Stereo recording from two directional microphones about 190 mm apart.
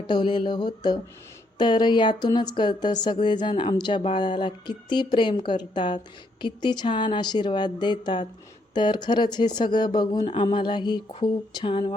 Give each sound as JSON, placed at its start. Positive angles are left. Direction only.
{"t": 0.1, "sound": "speech", "side_deg": 25}